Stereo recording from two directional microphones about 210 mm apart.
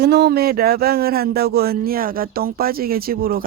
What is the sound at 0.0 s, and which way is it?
Speech, 50° right (ahead or behind).